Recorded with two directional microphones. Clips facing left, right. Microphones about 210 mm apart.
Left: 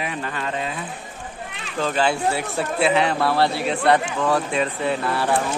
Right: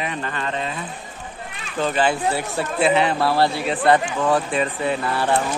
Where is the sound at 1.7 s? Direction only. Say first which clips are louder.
Right 1 dB; 5° right (ahead or behind).